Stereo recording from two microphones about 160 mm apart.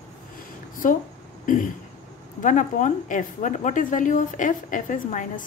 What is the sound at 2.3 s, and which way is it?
A woman's voice, 55° left (ahead or behind).